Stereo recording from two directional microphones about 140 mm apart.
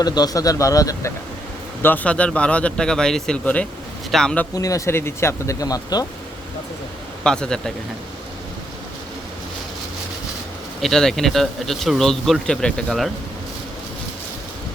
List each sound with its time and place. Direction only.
0.0 s speech: 30° left (ahead or behind)
1.8 s a man's voice: 10° left (ahead or behind)
4.5 s speech: 25° left (ahead or behind)
7.3 s speech: 5° left (ahead or behind)
10.8 s speech: centre (ahead or behind)